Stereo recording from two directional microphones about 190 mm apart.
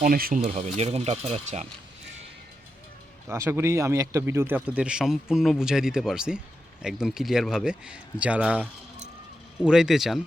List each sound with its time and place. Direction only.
0.0 s speech: 50° right (ahead or behind)
0.4 s speech: 35° right (ahead or behind)
3.2 s speech: 15° right (ahead or behind)